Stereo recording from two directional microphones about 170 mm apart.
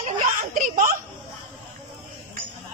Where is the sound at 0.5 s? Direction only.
55° right (ahead or behind).